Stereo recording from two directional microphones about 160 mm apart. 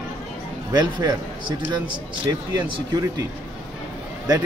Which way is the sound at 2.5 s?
25° right (ahead or behind).